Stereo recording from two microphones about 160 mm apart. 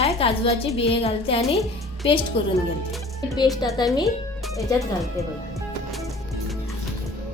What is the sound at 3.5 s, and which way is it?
Speech, 25° left (ahead or behind).